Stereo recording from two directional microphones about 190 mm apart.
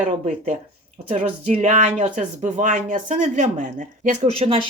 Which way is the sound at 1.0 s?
35° right (ahead or behind).